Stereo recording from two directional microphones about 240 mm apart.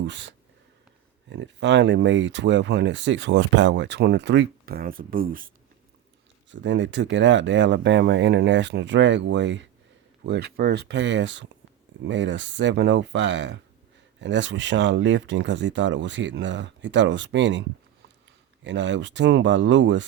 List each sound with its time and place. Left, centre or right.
0.0 s speech: right
6.5 s speech: right
18.6 s speech: right